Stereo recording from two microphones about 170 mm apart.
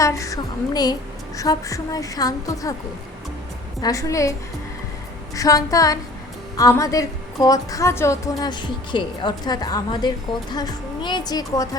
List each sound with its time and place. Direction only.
0.0 s a woman's voice: 20° left (ahead or behind)
3.8 s a woman's voice: 20° left (ahead or behind)
5.3 s a woman's voice: 20° left (ahead or behind)